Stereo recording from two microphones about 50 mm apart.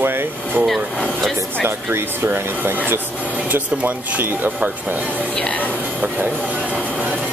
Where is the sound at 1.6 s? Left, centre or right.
Right.